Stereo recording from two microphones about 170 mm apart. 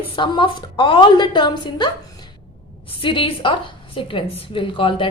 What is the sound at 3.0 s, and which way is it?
A woman's voice, 30° left (ahead or behind).